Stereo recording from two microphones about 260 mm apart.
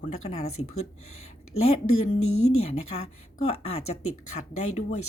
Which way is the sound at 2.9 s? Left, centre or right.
Left.